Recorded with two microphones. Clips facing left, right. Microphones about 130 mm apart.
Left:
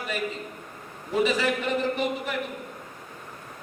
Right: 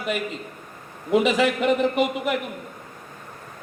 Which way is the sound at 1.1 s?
85° right.